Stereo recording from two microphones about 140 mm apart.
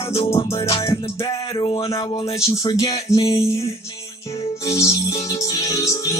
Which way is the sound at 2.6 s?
25° left (ahead or behind).